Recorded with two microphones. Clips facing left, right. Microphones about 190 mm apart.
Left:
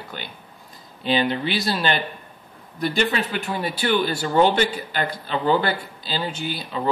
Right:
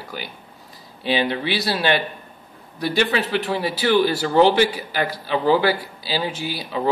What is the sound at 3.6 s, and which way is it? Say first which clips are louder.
A man's voice: right 3 dB; 5° right (ahead or behind).